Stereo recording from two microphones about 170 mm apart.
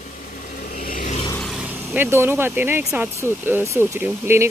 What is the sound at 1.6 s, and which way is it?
Speech, 10° right (ahead or behind).